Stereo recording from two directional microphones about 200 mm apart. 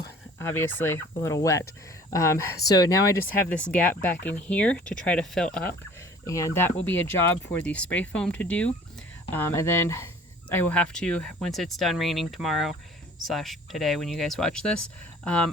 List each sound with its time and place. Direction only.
0.3 s a sound: 10° left (ahead or behind)
0.8 s speech: 10° left (ahead or behind)
3.5 s speech: 5° left (ahead or behind)
6.2 s speech: 15° left (ahead or behind)